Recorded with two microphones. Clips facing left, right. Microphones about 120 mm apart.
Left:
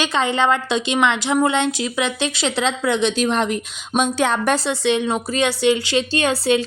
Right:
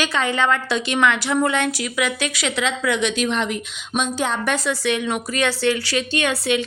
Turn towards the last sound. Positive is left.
turn(degrees=35)  # may be behind; listen again after turning